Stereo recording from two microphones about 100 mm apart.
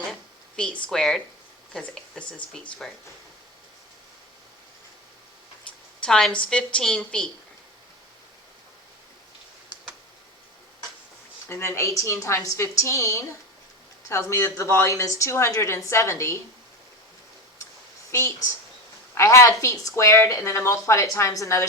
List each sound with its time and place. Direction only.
0.1 s a sound: 10° left (ahead or behind)
0.9 s speech: 5° left (ahead or behind)
6.0 s a woman's voice: 5° left (ahead or behind)
11.4 s a woman's voice: 25° left (ahead or behind)
18.1 s a woman's voice: 30° left (ahead or behind)